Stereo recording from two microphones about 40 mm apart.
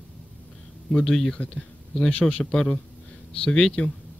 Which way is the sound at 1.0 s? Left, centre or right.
Centre.